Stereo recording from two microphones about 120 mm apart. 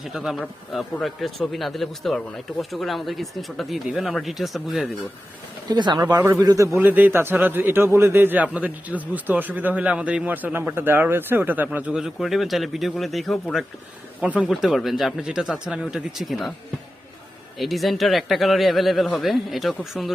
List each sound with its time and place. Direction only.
0.0 s a man's voice: 5° right (ahead or behind)
5.6 s speech: 40° right (ahead or behind)
6.1 s speech: 20° right (ahead or behind)
6.4 s speech: 35° right (ahead or behind)
6.7 s a man's voice: 15° right (ahead or behind); by 16.5 s centre (ahead or behind)
17.6 s a man's voice: centre (ahead or behind)